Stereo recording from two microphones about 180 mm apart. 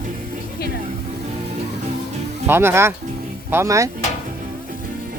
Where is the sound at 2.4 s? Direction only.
15° right (ahead or behind).